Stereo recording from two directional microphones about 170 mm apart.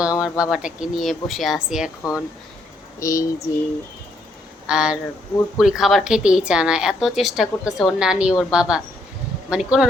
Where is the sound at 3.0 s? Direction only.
20° left (ahead or behind).